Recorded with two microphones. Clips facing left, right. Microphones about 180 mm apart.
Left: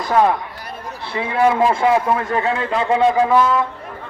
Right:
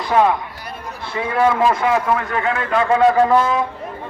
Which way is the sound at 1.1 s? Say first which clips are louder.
Left 1 dB; 25° left (ahead or behind).